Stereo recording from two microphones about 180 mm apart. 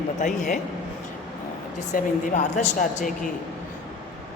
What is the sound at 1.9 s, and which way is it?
A woman's voice, 45° left (ahead or behind).